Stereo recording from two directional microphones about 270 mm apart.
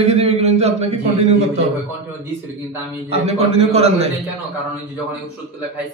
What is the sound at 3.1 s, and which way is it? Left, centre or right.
Speech, right.